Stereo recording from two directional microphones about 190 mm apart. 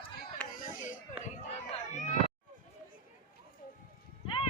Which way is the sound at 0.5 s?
45° left (ahead or behind).